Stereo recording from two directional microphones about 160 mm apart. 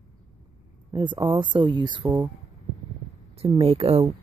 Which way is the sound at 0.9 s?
30° right (ahead or behind).